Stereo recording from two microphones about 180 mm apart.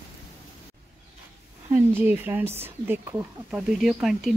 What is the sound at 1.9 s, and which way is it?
Speech, 10° right (ahead or behind).